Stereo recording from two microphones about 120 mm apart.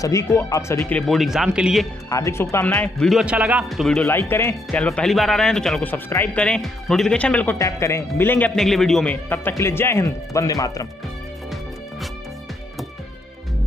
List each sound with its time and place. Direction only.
0.0 s speech: 25° left (ahead or behind)
1.0 s speech: centre (ahead or behind)
2.0 s speech: 25° left (ahead or behind)
3.1 s speech: 5° right (ahead or behind)
4.1 s speech: 20° left (ahead or behind)
4.6 s speech: 5° left (ahead or behind)
5.9 s speech: 15° left (ahead or behind)
7.5 s speech: 25° left (ahead or behind)
8.5 s speech: centre (ahead or behind); by 10.9 s 30° left (ahead or behind)